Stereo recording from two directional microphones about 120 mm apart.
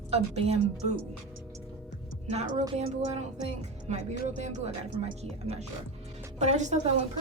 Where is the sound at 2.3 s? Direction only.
70° right (ahead or behind).